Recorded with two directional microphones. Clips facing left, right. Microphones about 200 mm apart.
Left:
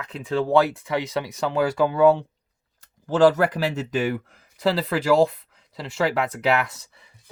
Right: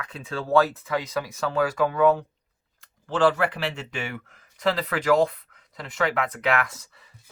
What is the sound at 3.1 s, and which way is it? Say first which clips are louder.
Speech: left 4 dB; 40° left (ahead or behind).